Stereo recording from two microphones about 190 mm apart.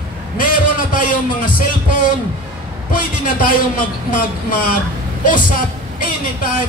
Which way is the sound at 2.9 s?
45° left (ahead or behind).